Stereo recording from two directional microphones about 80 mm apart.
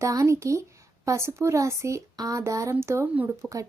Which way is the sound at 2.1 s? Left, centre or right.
Right.